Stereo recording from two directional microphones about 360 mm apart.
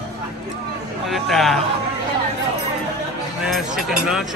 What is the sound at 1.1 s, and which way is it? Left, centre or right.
Speech, centre.